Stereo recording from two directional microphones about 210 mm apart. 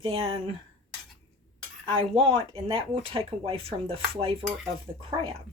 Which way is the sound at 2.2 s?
25° right (ahead or behind).